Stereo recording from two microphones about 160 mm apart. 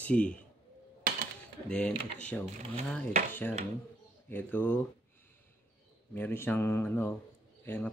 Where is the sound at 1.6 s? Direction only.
5° left (ahead or behind).